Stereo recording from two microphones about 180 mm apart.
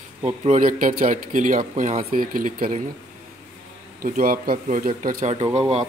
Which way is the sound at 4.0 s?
50° right (ahead or behind).